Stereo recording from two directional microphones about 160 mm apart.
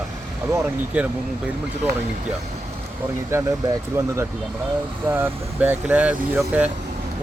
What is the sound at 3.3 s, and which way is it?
Speech, 15° right (ahead or behind).